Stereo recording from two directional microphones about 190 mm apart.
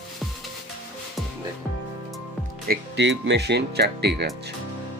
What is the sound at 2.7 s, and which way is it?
Speech, 65° right (ahead or behind).